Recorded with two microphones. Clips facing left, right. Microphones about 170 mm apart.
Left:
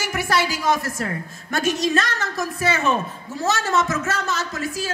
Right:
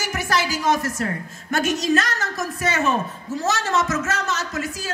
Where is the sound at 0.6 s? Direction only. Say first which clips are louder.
Right 1 dB; 35° left (ahead or behind).